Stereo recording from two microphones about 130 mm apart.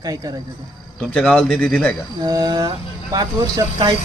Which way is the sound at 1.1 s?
10° left (ahead or behind).